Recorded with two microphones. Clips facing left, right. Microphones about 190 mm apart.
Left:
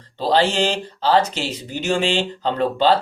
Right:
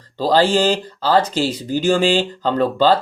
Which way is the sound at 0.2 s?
40° right (ahead or behind).